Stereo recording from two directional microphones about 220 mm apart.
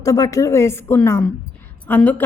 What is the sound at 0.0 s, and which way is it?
A woman's voice, 15° left (ahead or behind).